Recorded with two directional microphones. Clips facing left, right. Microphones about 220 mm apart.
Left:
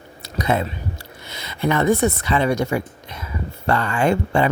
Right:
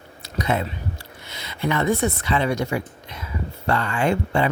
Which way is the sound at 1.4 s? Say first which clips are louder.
Left 3 dB; 45° left (ahead or behind).